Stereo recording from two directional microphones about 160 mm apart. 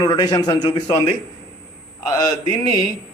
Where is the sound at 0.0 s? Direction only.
25° left (ahead or behind).